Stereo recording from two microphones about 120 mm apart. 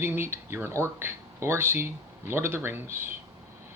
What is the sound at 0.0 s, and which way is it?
Speech, 20° right (ahead or behind).